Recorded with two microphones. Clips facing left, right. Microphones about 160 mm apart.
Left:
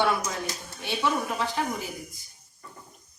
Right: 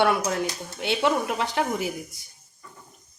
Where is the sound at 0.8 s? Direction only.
90° right.